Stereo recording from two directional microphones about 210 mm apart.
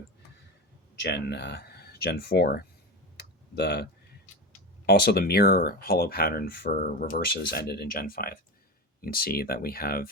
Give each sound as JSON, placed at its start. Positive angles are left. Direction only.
{"t": 1.0, "sound": "speech", "side_deg": 55}
{"t": 4.9, "sound": "speech", "side_deg": 50}